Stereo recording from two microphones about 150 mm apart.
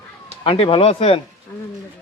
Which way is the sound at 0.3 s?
40° left (ahead or behind).